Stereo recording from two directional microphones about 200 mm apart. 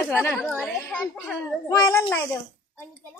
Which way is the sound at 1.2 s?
15° left (ahead or behind).